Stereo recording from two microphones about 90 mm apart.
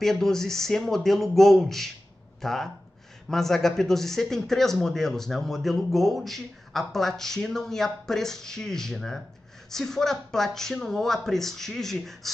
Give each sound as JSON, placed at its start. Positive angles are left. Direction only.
{"t": 0.0, "sound": "speech", "side_deg": 5}